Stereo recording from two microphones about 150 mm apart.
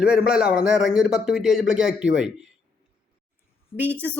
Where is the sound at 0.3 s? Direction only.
5° right (ahead or behind).